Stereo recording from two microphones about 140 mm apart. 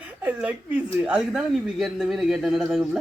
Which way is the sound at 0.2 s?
10° right (ahead or behind).